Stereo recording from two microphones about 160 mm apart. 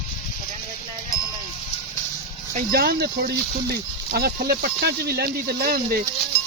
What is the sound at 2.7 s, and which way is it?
Speech, 75° right (ahead or behind).